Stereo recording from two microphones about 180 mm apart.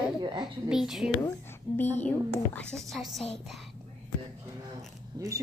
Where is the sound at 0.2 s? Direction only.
25° right (ahead or behind).